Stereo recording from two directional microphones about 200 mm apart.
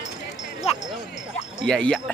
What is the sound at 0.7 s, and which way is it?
Music, 30° left (ahead or behind).